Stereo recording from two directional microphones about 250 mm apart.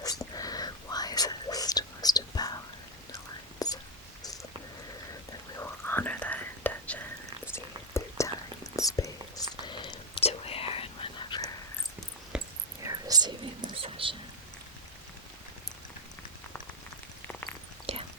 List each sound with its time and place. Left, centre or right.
0.0 s whispering: centre
3.6 s whispering: centre
5.5 s whispering: centre
12.3 s a sound: centre
12.9 s whispering: centre
17.9 s a sound: right